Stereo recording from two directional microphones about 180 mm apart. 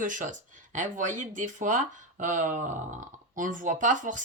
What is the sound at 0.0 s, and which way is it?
Speech, 45° right (ahead or behind).